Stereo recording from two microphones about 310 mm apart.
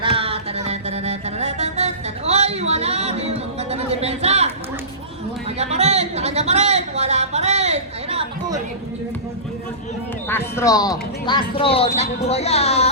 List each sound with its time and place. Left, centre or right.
0.0 s music: centre
5.5 s a sound: right
10.2 s speech: centre